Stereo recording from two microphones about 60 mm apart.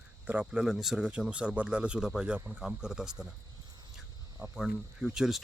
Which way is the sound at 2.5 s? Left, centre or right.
Centre.